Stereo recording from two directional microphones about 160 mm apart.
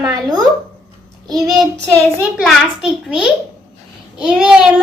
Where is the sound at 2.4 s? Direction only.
Centre (ahead or behind).